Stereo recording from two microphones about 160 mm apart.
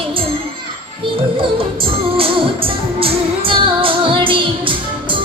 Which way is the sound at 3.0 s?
35° right (ahead or behind).